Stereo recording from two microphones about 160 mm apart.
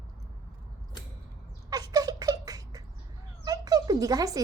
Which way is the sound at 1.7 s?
25° right (ahead or behind).